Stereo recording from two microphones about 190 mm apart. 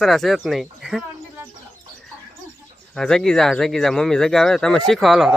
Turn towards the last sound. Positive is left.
turn(degrees=0)  # may be behind; listen again after turning